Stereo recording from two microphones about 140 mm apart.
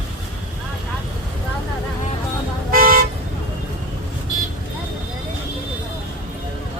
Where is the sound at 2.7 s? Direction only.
90° right.